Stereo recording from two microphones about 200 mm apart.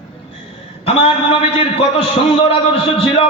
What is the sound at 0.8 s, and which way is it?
A man's voice, 30° left (ahead or behind).